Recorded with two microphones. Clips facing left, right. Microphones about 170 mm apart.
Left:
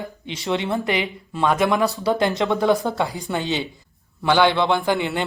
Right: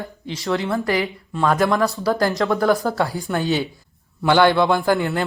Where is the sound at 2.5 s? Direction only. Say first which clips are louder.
Right 1 dB; 20° left (ahead or behind).